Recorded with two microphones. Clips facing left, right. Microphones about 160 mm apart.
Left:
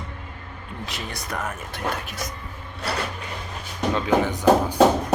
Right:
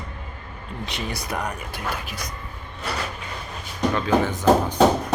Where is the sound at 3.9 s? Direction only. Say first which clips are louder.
Left 1 dB; 15° left (ahead or behind).